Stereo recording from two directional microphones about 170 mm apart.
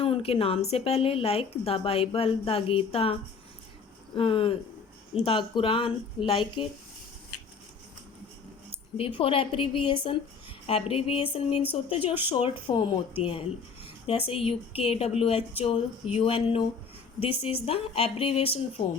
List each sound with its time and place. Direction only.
0.0 s a woman's voice: 35° left (ahead or behind)
9.0 s a woman's voice: 30° left (ahead or behind)